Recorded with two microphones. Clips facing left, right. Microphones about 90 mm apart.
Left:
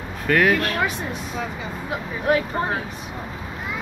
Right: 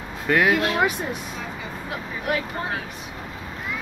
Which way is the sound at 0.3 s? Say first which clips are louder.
Left 1 dB; 15° right (ahead or behind).